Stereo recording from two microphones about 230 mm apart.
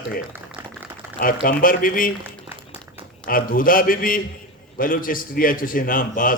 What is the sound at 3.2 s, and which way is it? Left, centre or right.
A man's voice, left.